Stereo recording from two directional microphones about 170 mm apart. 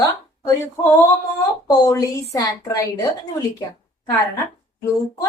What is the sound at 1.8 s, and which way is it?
A woman's voice, 20° left (ahead or behind).